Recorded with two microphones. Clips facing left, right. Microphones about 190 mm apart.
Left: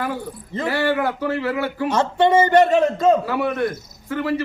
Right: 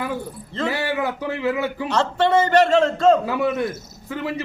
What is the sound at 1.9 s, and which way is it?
Speech, 15° left (ahead or behind).